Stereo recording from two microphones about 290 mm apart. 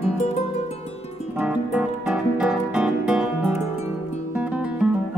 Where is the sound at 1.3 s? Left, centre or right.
Centre.